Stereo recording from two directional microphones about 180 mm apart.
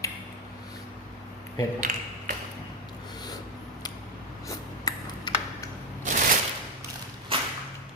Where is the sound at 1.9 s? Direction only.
40° right (ahead or behind).